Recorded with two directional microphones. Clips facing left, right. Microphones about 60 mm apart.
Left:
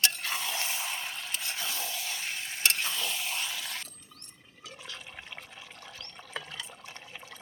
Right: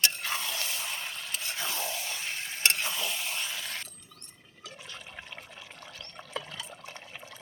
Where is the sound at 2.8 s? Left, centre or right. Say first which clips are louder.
Even; centre.